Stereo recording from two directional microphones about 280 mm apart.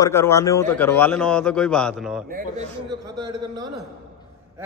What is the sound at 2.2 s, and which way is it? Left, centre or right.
Speech, right.